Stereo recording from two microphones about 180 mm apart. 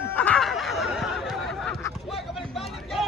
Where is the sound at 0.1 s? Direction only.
10° left (ahead or behind).